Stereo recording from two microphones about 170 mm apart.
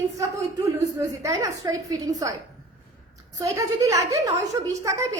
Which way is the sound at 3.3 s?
20° right (ahead or behind).